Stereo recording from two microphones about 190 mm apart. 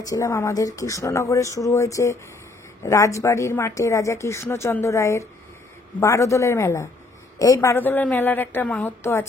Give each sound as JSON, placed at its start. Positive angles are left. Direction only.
{"t": 0.0, "sound": "a woman's voice", "side_deg": 15}